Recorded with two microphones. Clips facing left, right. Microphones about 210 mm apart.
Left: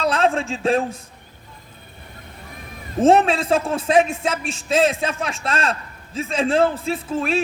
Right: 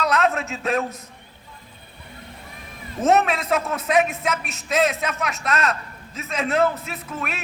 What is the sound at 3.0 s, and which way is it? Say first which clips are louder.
A man's voice: left 4 dB; 30° left (ahead or behind).